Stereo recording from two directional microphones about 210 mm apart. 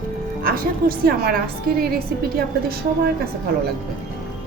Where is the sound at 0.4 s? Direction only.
45° right (ahead or behind).